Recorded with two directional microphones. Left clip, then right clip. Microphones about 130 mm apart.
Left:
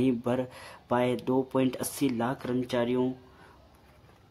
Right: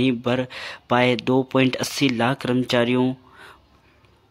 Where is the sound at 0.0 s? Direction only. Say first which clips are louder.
Right 6 dB; 10° right (ahead or behind).